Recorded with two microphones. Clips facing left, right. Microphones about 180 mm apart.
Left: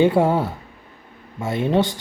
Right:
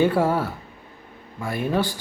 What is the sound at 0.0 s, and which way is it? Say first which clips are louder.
Speech: left 3 dB; 20° left (ahead or behind).